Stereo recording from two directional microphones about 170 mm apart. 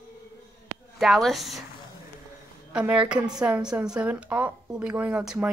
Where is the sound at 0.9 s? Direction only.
Centre (ahead or behind).